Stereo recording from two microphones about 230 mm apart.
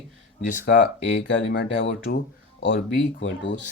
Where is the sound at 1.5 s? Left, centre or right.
Left.